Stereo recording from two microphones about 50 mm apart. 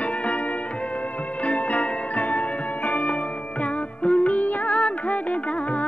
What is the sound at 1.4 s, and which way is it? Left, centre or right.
Music, left.